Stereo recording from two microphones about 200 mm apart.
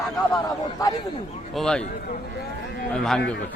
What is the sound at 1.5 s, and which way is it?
Speech, 5° left (ahead or behind).